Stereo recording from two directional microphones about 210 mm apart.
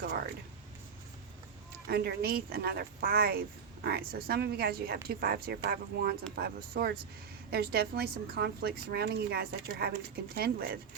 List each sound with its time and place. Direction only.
1.9 s speech: 50° right (ahead or behind)